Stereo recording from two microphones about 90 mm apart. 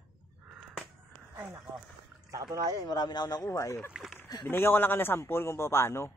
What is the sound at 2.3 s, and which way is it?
Speech, 40° right (ahead or behind).